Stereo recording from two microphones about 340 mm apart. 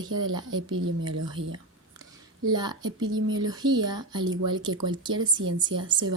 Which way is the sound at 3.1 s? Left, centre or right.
Right.